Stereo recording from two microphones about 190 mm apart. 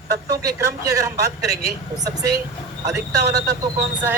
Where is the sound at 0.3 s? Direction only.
20° right (ahead or behind).